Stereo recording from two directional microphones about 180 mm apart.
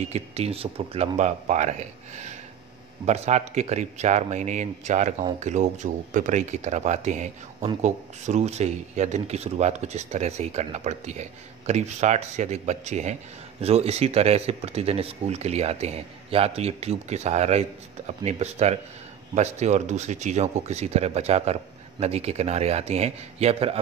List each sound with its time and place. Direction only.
0.1 s speech: 35° right (ahead or behind)